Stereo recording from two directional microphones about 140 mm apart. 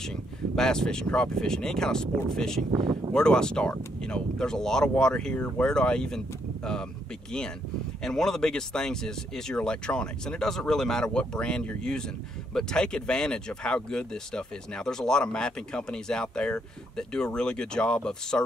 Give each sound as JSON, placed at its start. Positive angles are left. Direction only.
{"t": 0.0, "sound": "speech", "side_deg": 5}
{"t": 2.7, "sound": "speech", "side_deg": -35}
{"t": 3.1, "sound": "speech", "side_deg": 5}
{"t": 8.0, "sound": "speech", "side_deg": 5}